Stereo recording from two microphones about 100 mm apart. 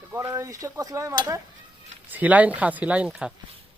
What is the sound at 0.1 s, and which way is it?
Speech, 30° right (ahead or behind).